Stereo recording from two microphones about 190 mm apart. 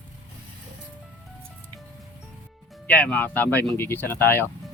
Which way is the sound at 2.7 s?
10° left (ahead or behind).